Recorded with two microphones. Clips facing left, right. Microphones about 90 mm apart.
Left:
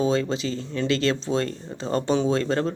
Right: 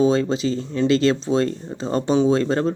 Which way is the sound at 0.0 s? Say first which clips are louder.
Right 5 dB; 25° right (ahead or behind).